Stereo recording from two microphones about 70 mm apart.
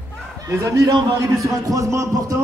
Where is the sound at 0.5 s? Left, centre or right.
Right.